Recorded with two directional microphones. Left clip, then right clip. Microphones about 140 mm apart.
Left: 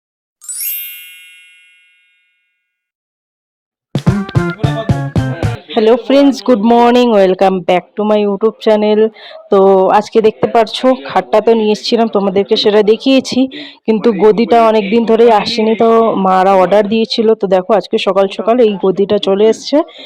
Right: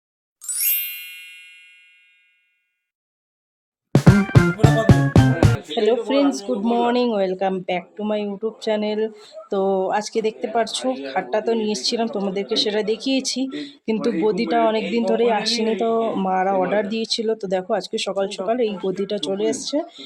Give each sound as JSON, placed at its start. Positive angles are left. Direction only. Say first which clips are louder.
{"t": 0.3, "sound": "ding", "louder": "left 1 dB", "side_deg": 0}
{"t": 3.9, "sound": "music", "louder": "even", "side_deg": 0}
{"t": 5.6, "sound": "speech", "louder": "left 13 dB", "side_deg": 45}
{"t": 6.6, "sound": "speech", "louder": "left 11 dB", "side_deg": 35}
{"t": 6.9, "sound": "speech", "louder": "left 12 dB", "side_deg": 50}
{"t": 16.0, "sound": "speech", "louder": "left 12 dB", "side_deg": 25}
{"t": 16.3, "sound": "speech", "louder": "left 11 dB", "side_deg": 40}